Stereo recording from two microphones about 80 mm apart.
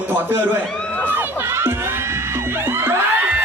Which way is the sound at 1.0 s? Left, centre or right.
Right.